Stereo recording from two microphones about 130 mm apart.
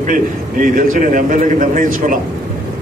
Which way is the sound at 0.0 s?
90° right.